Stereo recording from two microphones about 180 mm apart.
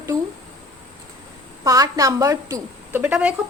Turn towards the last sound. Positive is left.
turn(degrees=-5)  # may be behind; listen again after turning